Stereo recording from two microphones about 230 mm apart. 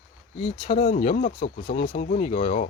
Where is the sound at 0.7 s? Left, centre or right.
Left.